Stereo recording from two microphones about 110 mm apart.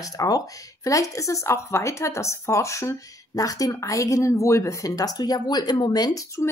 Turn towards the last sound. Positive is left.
turn(degrees=35)  # may be behind; listen again after turning